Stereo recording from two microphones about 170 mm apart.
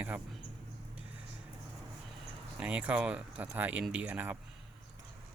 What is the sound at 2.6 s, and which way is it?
Speech, 10° right (ahead or behind).